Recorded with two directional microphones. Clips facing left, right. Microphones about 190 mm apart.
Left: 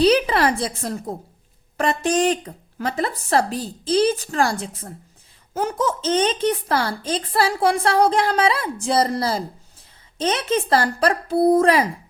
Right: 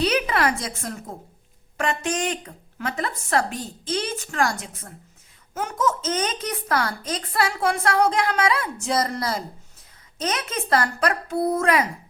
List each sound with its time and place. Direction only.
0.0 s a woman's voice: 30° left (ahead or behind)